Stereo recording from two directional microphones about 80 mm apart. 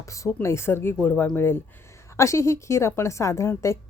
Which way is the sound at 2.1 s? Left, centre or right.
Left.